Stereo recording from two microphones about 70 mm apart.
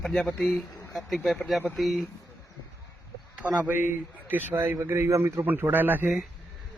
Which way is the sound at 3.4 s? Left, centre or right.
Centre.